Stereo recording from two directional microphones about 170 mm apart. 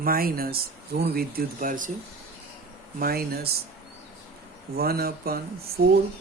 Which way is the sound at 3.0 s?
65° right (ahead or behind).